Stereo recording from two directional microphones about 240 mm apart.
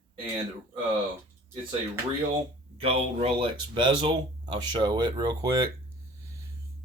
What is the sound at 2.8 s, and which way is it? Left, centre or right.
Speech, right.